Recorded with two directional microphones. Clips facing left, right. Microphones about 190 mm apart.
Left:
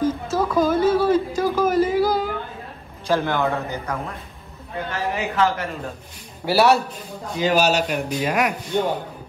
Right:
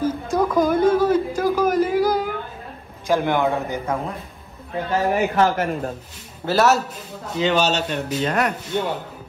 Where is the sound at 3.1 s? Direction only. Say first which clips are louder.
Right 2 dB; 15° right (ahead or behind).